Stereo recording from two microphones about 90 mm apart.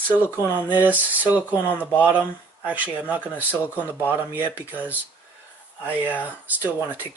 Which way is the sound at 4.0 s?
25° left (ahead or behind).